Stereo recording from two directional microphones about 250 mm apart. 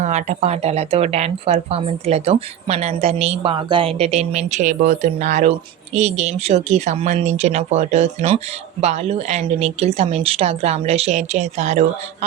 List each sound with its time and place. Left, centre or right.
0.0 s speech: right